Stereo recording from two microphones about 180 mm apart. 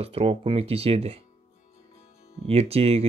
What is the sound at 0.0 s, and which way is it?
Speech, 35° right (ahead or behind).